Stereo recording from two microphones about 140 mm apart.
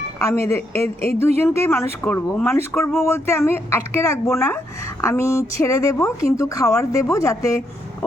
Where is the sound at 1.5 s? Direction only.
15° left (ahead or behind).